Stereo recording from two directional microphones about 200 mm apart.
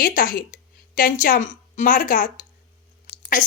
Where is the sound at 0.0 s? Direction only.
45° left (ahead or behind).